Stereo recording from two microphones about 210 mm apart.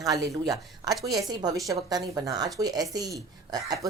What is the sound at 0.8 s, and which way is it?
A woman's voice, 15° right (ahead or behind).